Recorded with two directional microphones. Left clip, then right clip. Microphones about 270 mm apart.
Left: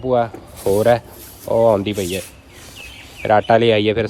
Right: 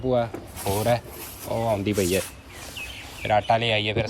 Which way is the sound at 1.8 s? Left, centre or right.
Centre.